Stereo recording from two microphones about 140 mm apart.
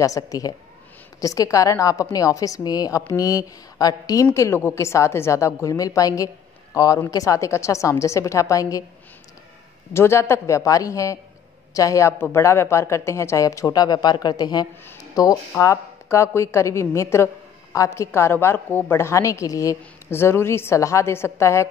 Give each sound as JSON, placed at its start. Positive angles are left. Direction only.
{"t": 0.0, "sound": "a woman's voice", "side_deg": 25}
{"t": 9.9, "sound": "a woman's voice", "side_deg": 20}